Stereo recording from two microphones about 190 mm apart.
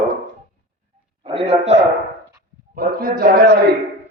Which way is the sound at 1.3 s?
30° right (ahead or behind).